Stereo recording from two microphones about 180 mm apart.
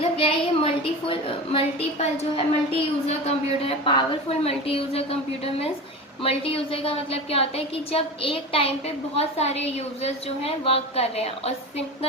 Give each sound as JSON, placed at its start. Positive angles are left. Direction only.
{"t": 0.0, "sound": "a sound", "side_deg": 30}
{"t": 1.5, "sound": "a woman's voice", "side_deg": 30}
{"t": 6.2, "sound": "a woman's voice", "side_deg": 30}